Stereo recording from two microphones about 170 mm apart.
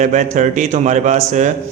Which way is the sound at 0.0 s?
45° right (ahead or behind).